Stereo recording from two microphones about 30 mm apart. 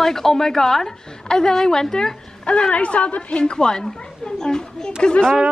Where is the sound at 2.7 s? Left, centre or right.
Left.